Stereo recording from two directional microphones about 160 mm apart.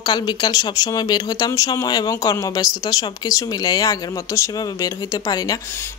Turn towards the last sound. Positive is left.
turn(degrees=20)  # may be behind; listen again after turning